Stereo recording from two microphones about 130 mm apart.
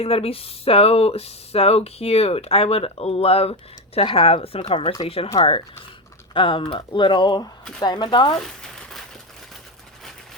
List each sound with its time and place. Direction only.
0.0 s speech: 50° left (ahead or behind)
8.4 s crumpling: 5° left (ahead or behind)